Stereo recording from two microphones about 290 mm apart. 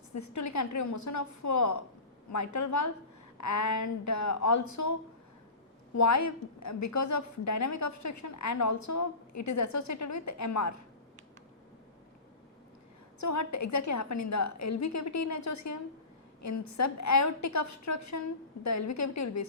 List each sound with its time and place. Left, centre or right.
0.1 s a woman's voice: left
13.1 s a woman's voice: left